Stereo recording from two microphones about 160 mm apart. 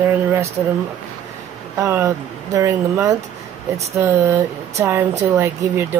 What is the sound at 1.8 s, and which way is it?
Speech, 15° right (ahead or behind).